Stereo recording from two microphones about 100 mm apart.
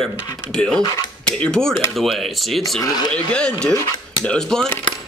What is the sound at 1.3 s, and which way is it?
Speech, 10° left (ahead or behind).